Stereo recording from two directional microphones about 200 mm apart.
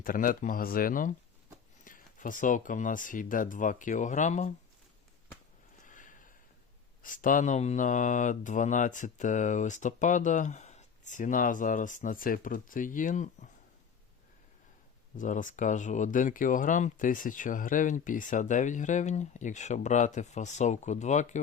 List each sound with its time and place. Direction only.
0.0 s speech: 45° left (ahead or behind)
5.8 s a sound: 40° left (ahead or behind)
7.0 s speech: 40° left (ahead or behind)
15.2 s speech: 40° left (ahead or behind)